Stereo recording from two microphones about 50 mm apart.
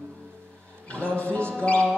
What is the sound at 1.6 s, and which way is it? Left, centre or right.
Chant, left.